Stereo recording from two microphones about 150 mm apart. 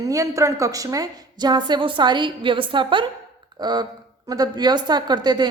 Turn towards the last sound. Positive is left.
turn(degrees=-30)  # may be behind; listen again after turning